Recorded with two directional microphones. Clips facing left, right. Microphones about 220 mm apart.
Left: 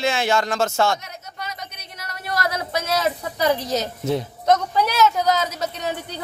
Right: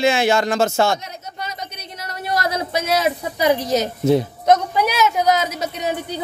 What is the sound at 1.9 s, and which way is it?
Speech, 20° right (ahead or behind).